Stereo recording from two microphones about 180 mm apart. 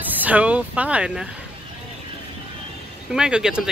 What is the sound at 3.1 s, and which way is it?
Speech, 5° right (ahead or behind).